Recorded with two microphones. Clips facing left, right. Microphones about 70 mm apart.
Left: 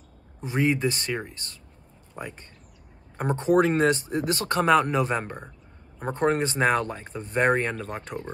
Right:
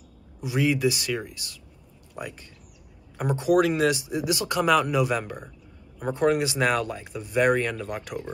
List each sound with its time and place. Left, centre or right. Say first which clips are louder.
0.5 s speech: right 1 dB; left
2.2 s speech: right 1 dB; left